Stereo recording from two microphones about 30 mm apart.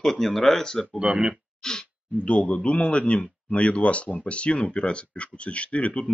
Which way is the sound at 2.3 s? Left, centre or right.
Left.